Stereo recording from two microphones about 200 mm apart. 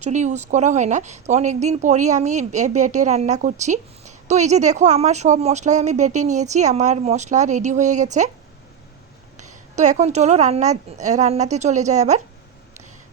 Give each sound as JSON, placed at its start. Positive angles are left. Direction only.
{"t": 0.0, "sound": "speech", "side_deg": -35}
{"t": 9.4, "sound": "speech", "side_deg": -35}